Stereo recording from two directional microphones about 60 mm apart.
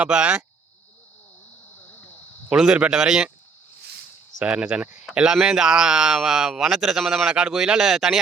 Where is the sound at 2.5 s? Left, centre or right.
Centre.